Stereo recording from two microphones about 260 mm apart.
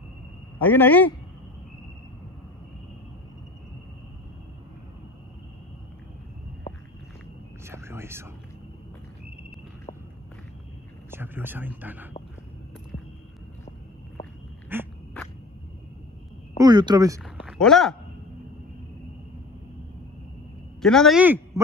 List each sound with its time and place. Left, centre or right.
0.6 s speech: centre
7.6 s whispering: centre
11.1 s speech: centre
14.7 s a sound: centre
16.5 s speech: centre
17.2 s a sound: centre
20.8 s speech: centre